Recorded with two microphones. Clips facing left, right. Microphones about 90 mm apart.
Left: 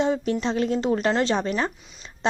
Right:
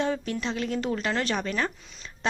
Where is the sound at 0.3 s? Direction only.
30° left (ahead or behind).